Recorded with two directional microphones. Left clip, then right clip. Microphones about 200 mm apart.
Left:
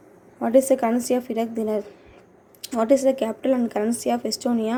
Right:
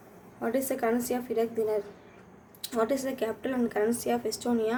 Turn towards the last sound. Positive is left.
turn(degrees=30)  # may be behind; listen again after turning